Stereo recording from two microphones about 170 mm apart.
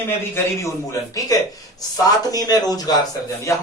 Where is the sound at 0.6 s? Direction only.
20° left (ahead or behind).